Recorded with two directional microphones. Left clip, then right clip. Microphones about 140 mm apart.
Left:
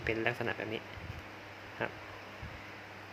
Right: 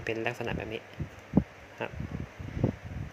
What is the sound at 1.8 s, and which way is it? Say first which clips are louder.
Speech: right 1 dB; 30° right (ahead or behind).